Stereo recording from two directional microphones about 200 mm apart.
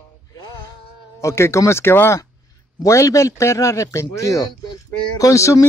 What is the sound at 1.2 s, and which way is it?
Speech, 15° left (ahead or behind).